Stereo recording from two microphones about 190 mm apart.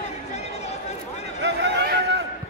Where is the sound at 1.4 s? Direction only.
65° right (ahead or behind).